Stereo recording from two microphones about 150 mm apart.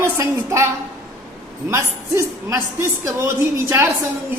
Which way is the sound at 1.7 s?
20° right (ahead or behind).